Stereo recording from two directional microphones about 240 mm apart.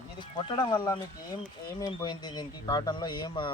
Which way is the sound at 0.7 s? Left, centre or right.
Centre.